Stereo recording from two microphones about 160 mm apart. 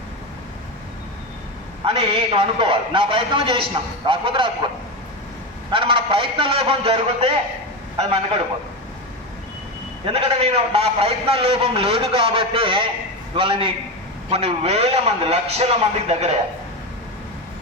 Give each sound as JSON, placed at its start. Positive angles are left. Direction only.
{"t": 1.8, "sound": "a man's voice", "side_deg": -35}
{"t": 5.7, "sound": "a man's voice", "side_deg": -30}
{"t": 10.1, "sound": "a man's voice", "side_deg": -40}